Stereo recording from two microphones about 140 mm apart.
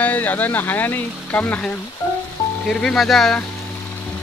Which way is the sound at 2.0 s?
20° left (ahead or behind).